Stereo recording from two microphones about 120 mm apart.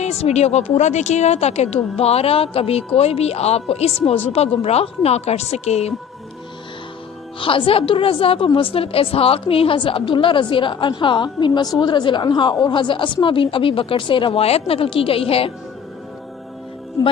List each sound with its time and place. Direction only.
0.0 s speech: 60° left (ahead or behind)
7.3 s a woman's voice: 45° left (ahead or behind)